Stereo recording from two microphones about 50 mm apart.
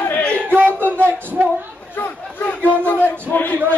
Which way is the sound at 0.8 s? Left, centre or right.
Right.